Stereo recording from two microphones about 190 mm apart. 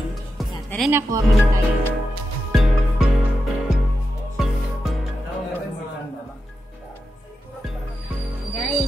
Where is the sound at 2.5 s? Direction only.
Centre (ahead or behind).